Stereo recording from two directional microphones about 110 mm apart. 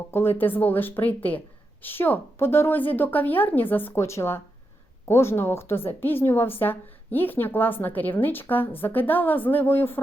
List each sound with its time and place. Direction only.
0.1 s a woman's voice: 20° left (ahead or behind)